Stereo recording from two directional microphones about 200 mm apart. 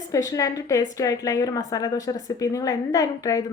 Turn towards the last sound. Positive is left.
turn(degrees=15)  # may be behind; listen again after turning